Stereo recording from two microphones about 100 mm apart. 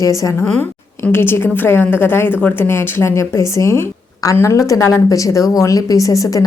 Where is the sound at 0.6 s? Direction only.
20° left (ahead or behind).